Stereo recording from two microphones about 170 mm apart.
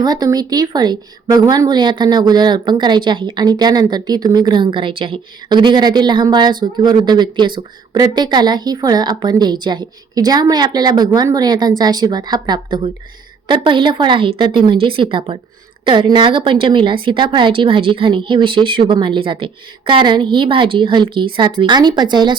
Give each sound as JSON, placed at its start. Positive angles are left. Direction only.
{"t": 0.0, "sound": "a woman's voice", "side_deg": -25}